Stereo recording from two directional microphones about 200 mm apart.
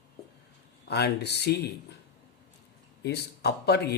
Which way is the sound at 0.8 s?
55° left (ahead or behind).